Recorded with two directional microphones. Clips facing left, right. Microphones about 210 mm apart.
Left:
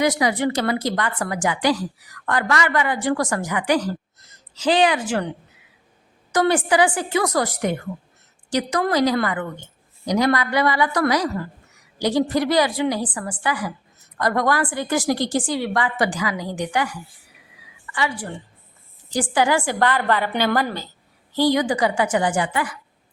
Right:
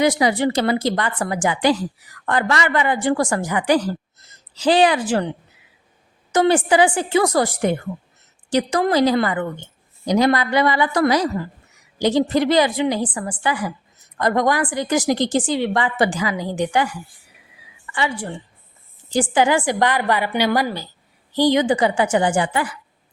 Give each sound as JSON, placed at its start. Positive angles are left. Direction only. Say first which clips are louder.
{"t": 0.0, "sound": "a woman's voice", "louder": "right 2 dB", "side_deg": -25}
{"t": 6.3, "sound": "a woman's voice", "louder": "right 3 dB", "side_deg": -25}
{"t": 17.9, "sound": "a woman's voice", "louder": "right 2 dB", "side_deg": -25}